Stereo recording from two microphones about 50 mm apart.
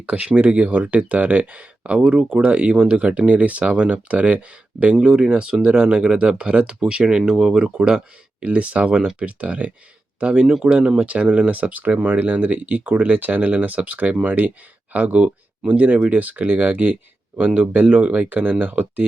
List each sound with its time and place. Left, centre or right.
0.0 s speech: right